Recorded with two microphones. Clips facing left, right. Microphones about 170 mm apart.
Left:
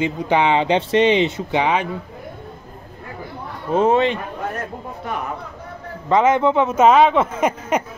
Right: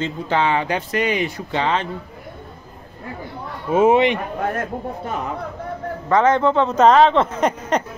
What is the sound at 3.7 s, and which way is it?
Speech, 10° right (ahead or behind).